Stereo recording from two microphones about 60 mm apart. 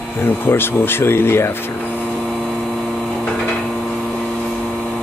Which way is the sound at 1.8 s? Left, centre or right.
Left.